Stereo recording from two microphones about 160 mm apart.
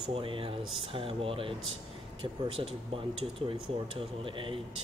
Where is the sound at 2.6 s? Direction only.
35° right (ahead or behind).